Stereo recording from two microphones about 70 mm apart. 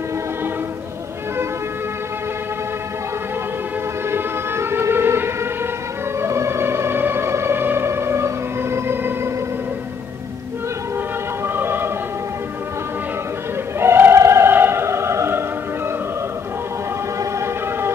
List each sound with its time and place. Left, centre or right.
4.1 s music: right
11.4 s opera: right
13.7 s opera: right
17.2 s siren: right